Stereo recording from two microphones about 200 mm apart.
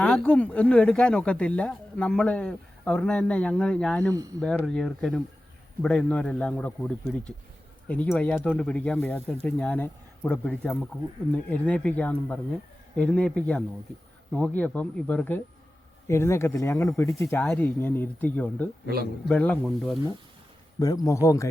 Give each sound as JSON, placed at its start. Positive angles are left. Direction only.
{"t": 0.0, "sound": "speech", "side_deg": 5}
{"t": 20.7, "sound": "speech", "side_deg": 20}